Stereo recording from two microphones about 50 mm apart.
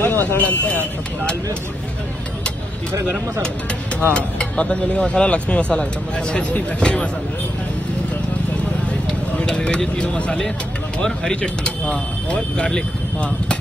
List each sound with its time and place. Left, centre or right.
0.0 s a sound: left
0.4 s speech: left
4.1 s speech: left
9.4 s speech: centre